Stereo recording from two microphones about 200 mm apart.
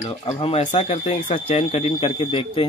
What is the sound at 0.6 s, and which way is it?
Speech, 35° left (ahead or behind).